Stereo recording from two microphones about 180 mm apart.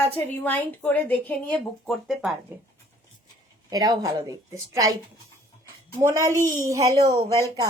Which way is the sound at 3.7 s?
20° right (ahead or behind).